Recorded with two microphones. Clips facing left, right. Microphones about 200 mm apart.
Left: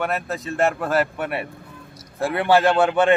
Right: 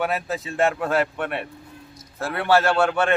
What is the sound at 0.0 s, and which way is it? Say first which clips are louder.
A man's voice: even; centre (ahead or behind).